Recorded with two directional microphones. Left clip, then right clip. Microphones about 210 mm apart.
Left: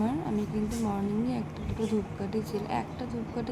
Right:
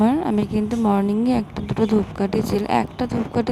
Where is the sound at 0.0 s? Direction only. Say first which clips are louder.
Right 12 dB; 50° right (ahead or behind).